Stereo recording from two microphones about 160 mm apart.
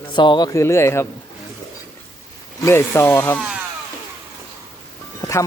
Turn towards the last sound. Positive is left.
turn(degrees=20)  # may be behind; listen again after turning